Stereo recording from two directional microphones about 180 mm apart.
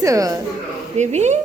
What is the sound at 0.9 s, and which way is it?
Speech, 40° right (ahead or behind).